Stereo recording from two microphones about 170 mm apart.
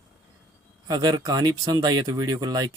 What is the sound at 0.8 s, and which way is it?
Speech, 25° right (ahead or behind).